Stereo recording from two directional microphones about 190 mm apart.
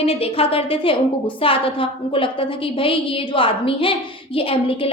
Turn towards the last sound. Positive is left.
turn(degrees=30)  # may be behind; listen again after turning